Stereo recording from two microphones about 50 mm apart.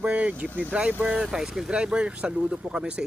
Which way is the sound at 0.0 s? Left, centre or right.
Right.